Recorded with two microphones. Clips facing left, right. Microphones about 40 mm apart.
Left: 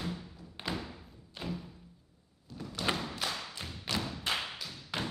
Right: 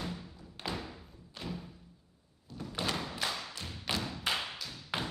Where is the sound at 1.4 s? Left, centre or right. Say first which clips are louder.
Left 2 dB; centre.